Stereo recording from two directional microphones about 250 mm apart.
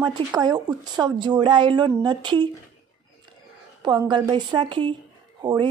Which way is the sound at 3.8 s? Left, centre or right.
Centre.